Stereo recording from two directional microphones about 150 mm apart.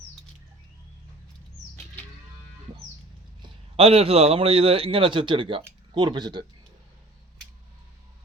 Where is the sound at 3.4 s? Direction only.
40° right (ahead or behind).